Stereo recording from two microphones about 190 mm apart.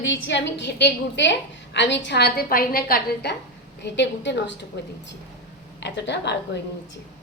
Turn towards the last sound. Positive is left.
turn(degrees=65)  # may be behind; listen again after turning